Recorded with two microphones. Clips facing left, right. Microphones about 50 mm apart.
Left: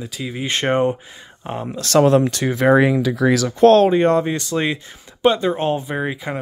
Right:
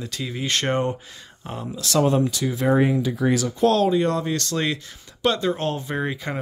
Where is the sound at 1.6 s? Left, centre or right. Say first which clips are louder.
Left 6 dB; left.